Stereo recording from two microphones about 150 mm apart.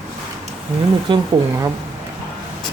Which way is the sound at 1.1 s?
30° right (ahead or behind).